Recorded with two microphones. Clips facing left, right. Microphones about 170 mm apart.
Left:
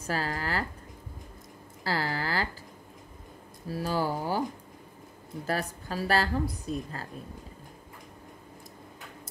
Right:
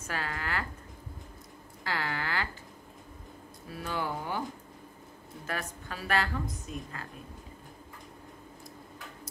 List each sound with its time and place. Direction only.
0.0 s a woman's voice: 35° left (ahead or behind)
1.9 s speech: 35° left (ahead or behind)
3.6 s a woman's voice: 35° left (ahead or behind)
5.5 s a woman's voice: 35° left (ahead or behind)